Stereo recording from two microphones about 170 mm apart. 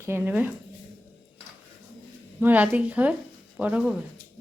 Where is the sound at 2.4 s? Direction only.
10° right (ahead or behind).